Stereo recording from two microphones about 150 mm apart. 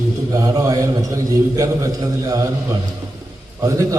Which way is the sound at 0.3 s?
25° right (ahead or behind).